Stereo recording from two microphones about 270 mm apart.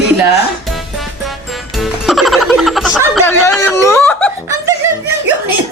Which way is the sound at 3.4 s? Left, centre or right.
Centre.